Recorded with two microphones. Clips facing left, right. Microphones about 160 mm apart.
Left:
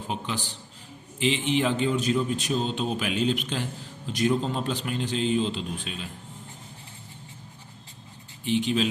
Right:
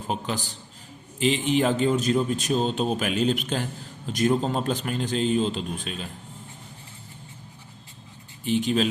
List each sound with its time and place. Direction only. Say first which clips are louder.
0.1 s a man's voice: right 3 dB; 40° right (ahead or behind)
8.4 s a man's voice: right 2 dB; 45° right (ahead or behind)